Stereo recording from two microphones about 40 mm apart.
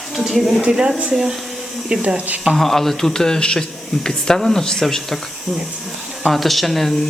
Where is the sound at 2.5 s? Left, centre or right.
Centre.